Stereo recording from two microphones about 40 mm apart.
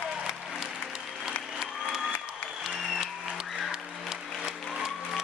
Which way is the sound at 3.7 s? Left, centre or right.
Centre.